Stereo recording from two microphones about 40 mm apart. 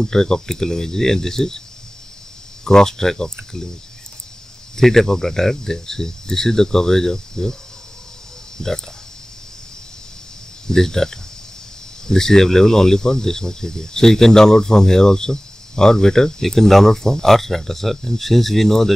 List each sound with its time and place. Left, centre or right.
0.0 s speech: centre
2.6 s speech: centre
4.7 s speech: centre
8.5 s speech: centre
10.7 s speech: centre